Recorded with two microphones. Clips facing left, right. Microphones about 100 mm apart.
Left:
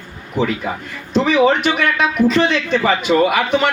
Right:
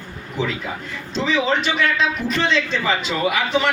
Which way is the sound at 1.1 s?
60° left (ahead or behind).